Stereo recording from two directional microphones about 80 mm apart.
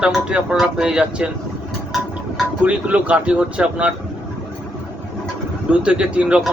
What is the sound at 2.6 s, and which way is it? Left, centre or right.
Speech, centre.